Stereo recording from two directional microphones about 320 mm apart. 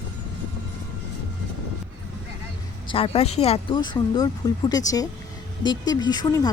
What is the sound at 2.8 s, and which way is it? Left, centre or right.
Speech, centre.